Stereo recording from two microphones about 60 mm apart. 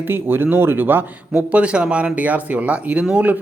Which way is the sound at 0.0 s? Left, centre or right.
Right.